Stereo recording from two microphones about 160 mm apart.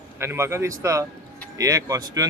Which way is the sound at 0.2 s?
15° right (ahead or behind).